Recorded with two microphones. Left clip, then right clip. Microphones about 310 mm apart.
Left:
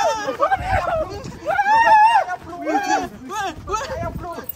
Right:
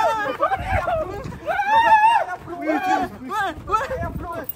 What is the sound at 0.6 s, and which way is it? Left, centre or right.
Speech, left.